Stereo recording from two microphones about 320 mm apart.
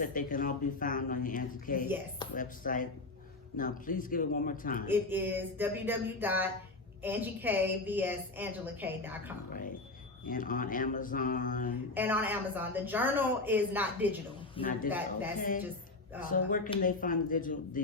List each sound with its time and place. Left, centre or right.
0.0 s speech: left
4.9 s a woman's voice: centre
10.2 s speech: left
11.9 s a woman's voice: centre
14.5 s speech: left
14.8 s a woman's voice: centre
15.4 s speech: left